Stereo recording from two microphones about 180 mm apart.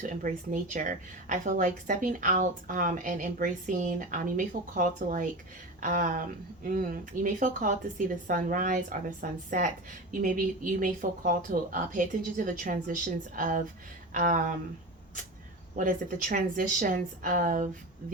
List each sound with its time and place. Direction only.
0.0 s speech: 45° right (ahead or behind)
15.7 s speech: 50° right (ahead or behind)